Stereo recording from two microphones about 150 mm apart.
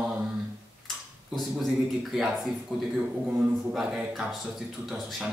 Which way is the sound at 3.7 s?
5° right (ahead or behind).